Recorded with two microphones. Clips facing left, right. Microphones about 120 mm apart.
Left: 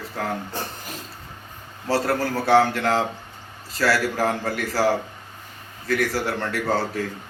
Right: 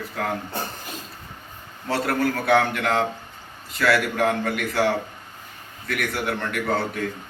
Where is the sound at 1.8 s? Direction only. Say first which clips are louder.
Even; 30° left (ahead or behind).